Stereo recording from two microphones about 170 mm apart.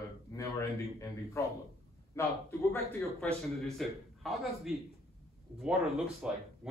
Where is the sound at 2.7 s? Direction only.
5° left (ahead or behind).